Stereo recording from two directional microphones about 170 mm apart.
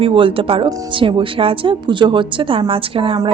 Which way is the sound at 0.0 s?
30° right (ahead or behind).